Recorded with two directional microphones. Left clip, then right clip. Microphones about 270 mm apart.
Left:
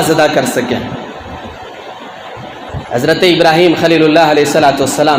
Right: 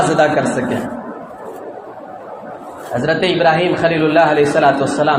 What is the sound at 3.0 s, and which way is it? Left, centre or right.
A man's voice, left.